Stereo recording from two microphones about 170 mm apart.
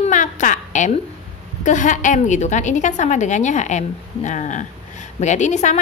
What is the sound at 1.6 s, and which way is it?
A woman's voice, 45° left (ahead or behind).